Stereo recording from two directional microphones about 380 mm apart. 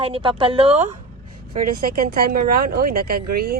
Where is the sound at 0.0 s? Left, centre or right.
Centre.